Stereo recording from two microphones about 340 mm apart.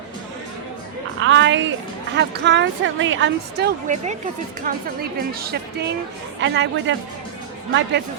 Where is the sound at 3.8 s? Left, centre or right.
Right.